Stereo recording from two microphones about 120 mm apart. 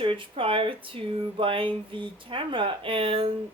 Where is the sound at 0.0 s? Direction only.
45° right (ahead or behind).